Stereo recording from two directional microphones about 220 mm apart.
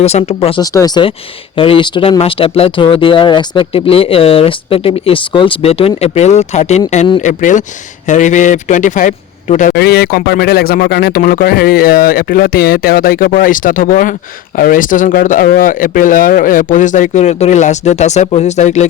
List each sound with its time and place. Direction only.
0.0 s a man's voice: 30° left (ahead or behind)